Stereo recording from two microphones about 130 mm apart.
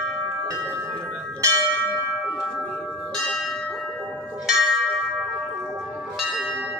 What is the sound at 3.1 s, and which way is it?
Bell, 5° left (ahead or behind).